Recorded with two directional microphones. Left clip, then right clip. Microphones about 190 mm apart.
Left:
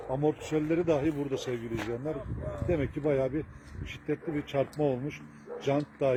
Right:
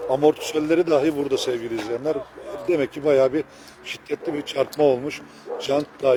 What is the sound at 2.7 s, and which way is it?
Speech, 10° right (ahead or behind).